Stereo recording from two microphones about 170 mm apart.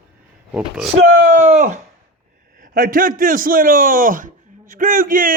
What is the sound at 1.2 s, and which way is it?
Speech, 50° right (ahead or behind).